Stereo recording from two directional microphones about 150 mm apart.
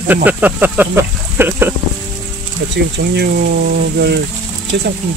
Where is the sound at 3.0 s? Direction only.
90° right.